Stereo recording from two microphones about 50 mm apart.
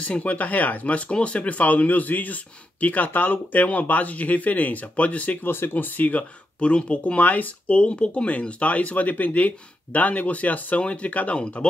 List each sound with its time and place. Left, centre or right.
0.0 s speech: left
5.4 s speech: left